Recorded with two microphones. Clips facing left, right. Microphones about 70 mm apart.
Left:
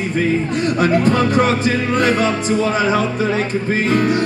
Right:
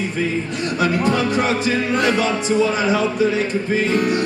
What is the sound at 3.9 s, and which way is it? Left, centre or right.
Music, left.